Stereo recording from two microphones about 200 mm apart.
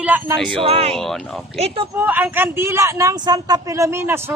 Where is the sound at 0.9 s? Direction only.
Centre (ahead or behind).